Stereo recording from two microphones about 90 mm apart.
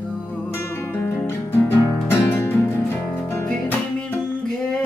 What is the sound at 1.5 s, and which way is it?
Music, 25° left (ahead or behind).